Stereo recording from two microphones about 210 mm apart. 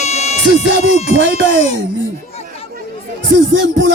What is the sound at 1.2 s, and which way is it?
Music, 60° right (ahead or behind).